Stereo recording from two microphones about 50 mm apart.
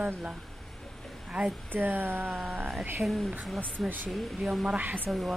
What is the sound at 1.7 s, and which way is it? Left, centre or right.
Speech, right.